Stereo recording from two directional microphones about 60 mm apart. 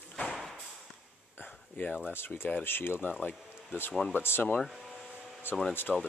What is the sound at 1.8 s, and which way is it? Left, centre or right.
Speech, left.